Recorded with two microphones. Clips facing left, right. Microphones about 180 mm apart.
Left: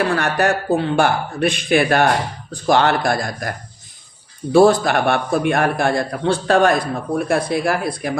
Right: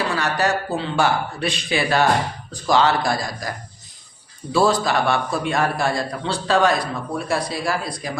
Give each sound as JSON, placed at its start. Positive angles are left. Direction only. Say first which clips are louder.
{"t": 0.0, "sound": "a man's voice", "louder": "left 4 dB", "side_deg": 55}
{"t": 4.5, "sound": "a man's voice", "louder": "left 6 dB", "side_deg": 55}